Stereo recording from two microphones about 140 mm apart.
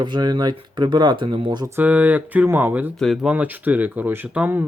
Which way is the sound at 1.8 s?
10° right (ahead or behind).